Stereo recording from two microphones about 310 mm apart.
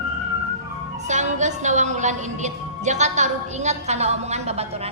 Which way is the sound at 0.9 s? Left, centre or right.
Right.